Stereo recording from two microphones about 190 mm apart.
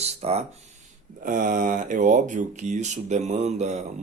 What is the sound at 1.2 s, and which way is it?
Speech, 45° right (ahead or behind).